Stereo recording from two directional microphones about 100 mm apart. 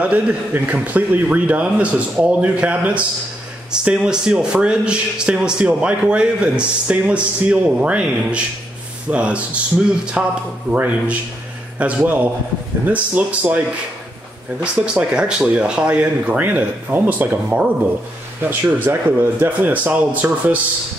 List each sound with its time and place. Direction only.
0.0 s speech: 15° right (ahead or behind)
14.6 s a man's voice: 10° right (ahead or behind)